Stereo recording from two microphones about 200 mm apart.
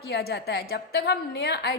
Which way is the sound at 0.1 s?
55° left (ahead or behind).